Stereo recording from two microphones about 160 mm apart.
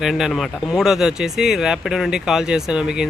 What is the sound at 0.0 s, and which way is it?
Speech, centre (ahead or behind).